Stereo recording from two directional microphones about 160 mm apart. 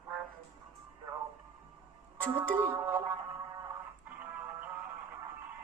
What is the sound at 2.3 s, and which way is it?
Speech, 10° right (ahead or behind).